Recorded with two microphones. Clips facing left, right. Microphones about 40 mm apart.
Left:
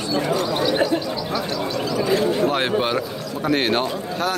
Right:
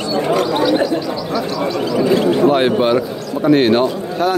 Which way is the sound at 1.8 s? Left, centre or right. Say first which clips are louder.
Right 6 dB; right.